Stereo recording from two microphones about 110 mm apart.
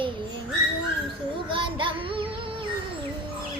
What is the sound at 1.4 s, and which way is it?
Child singing, 50° right (ahead or behind).